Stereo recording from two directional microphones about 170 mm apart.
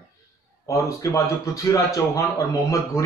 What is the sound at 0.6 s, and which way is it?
A man's voice, 15° left (ahead or behind).